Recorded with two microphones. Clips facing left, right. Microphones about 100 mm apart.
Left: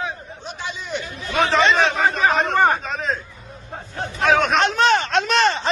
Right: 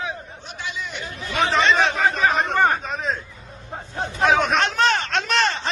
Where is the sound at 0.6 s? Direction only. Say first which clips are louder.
Left 2 dB; 30° left (ahead or behind).